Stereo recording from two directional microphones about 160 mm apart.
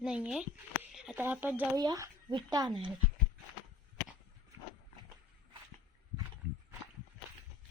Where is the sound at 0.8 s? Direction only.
5° right (ahead or behind).